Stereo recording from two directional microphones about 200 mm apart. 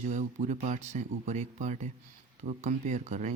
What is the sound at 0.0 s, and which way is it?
Speech, 40° right (ahead or behind).